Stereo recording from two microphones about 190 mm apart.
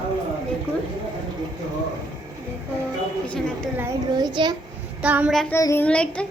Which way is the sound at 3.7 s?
15° right (ahead or behind).